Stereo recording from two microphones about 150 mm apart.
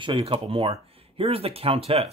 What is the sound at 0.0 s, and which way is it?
Speech, 35° right (ahead or behind).